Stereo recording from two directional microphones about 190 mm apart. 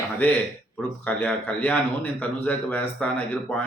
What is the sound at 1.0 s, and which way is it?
Speech, 10° left (ahead or behind).